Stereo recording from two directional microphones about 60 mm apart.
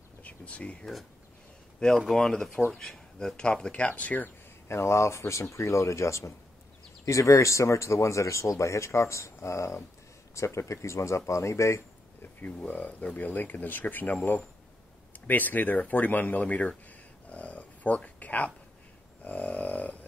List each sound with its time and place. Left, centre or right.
0.2 s speech: left
2.0 s speech: centre; by 4.3 s left
4.6 s speech: left
12.2 s speech: left
15.1 s speech: left
17.3 s dog: left
19.2 s a sound: left